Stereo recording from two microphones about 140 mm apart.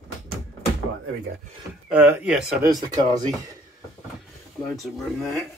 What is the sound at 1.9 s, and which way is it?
Speech, 15° right (ahead or behind).